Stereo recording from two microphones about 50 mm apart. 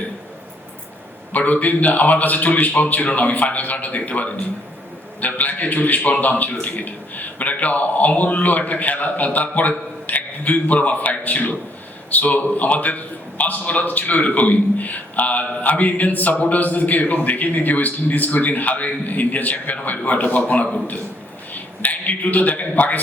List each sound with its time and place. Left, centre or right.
1.3 s a man's voice: left